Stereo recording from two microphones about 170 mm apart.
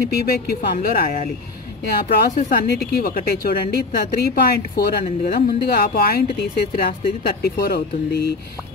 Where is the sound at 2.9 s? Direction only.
60° left (ahead or behind).